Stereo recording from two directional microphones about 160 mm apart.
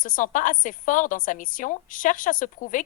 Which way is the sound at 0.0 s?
55° left (ahead or behind).